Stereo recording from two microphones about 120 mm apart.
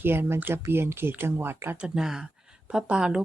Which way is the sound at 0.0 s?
20° right (ahead or behind).